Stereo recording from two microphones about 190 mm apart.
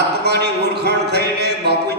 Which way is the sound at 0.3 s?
60° right (ahead or behind).